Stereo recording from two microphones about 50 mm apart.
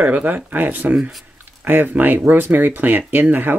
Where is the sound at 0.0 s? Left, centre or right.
Right.